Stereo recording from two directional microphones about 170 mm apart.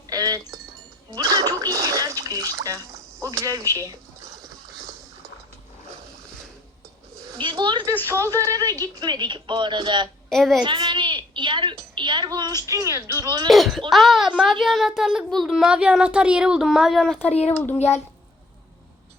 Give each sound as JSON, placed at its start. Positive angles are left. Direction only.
{"t": 0.1, "sound": "a sound", "side_deg": -20}
{"t": 1.1, "sound": "speech", "side_deg": -20}
{"t": 4.4, "sound": "boat", "side_deg": 0}
{"t": 7.3, "sound": "speech", "side_deg": -25}
{"t": 8.0, "sound": "speech", "side_deg": -15}
{"t": 10.2, "sound": "a child's voice", "side_deg": 0}
{"t": 10.6, "sound": "a sound", "side_deg": -30}
{"t": 12.6, "sound": "speech", "side_deg": -20}
{"t": 13.5, "sound": "a child's voice", "side_deg": 0}
{"t": 17.7, "sound": "a child's voice", "side_deg": 40}